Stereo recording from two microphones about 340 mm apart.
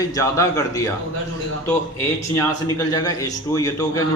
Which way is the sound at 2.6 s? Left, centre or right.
Centre.